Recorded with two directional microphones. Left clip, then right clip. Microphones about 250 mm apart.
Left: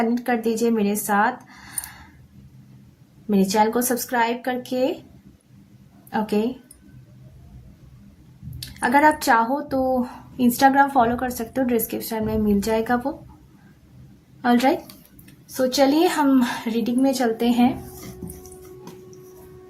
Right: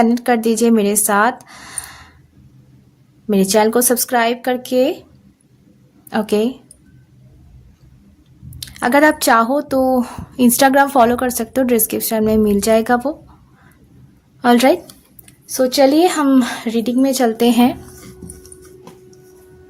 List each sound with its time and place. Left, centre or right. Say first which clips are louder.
0.0 s speech: right 8 dB; right
3.2 s speech: right 6 dB; right
6.1 s speech: right 6 dB; right
8.5 s speech: right 5 dB; right
14.4 s a woman's voice: right 7 dB; right